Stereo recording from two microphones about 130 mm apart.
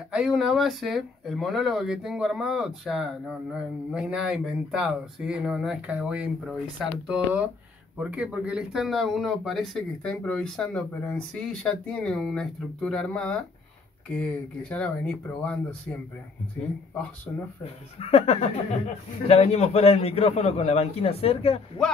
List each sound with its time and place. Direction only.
0.1 s speech: 5° right (ahead or behind)
18.0 s a man's voice: 50° left (ahead or behind)